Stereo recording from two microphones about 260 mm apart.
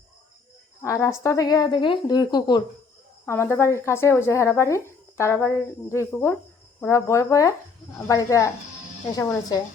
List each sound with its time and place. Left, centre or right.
0.8 s speech: centre